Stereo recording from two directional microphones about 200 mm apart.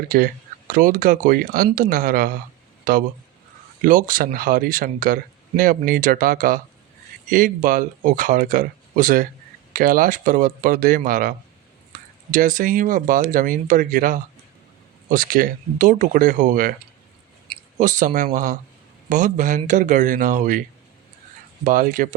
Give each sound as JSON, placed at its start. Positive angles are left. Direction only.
{"t": 0.1, "sound": "speech", "side_deg": -50}
{"t": 17.7, "sound": "speech", "side_deg": -40}